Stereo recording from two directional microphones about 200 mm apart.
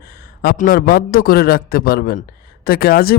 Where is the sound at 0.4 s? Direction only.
45° left (ahead or behind).